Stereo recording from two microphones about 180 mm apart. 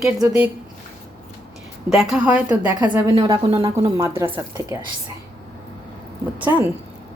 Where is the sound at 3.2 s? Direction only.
30° right (ahead or behind).